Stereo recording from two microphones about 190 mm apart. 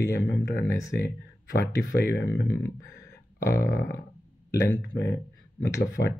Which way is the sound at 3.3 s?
15° left (ahead or behind).